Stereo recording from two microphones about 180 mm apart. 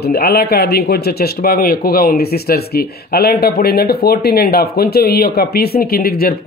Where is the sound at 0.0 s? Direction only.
60° left (ahead or behind).